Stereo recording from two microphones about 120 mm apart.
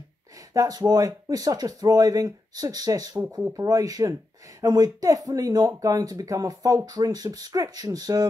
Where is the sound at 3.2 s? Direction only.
15° right (ahead or behind).